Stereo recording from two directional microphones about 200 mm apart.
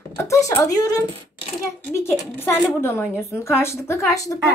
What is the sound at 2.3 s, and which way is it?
A woman's voice, 10° left (ahead or behind).